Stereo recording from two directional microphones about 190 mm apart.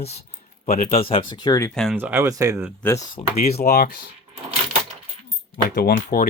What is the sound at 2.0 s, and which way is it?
Speech, 10° right (ahead or behind).